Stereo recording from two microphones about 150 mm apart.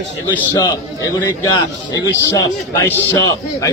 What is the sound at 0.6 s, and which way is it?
A man's voice, 25° left (ahead or behind).